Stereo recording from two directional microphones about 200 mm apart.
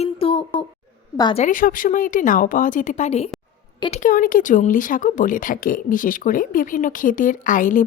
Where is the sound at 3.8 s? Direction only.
25° left (ahead or behind).